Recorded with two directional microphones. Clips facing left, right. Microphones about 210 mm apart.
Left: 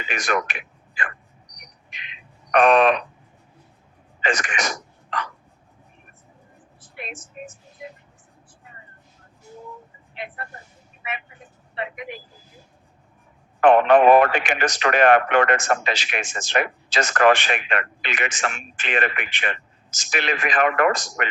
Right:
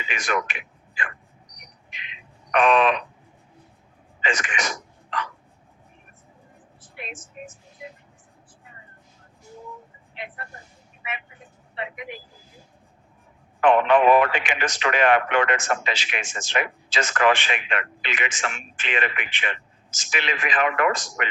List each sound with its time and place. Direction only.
0.0 s speech: 45° left (ahead or behind)
2.0 s a sound: 45° left (ahead or behind)
4.2 s speech: 40° left (ahead or behind)
10.2 s speech: 45° left (ahead or behind)
11.8 s speech: 45° left (ahead or behind)
13.6 s speech: 45° left (ahead or behind)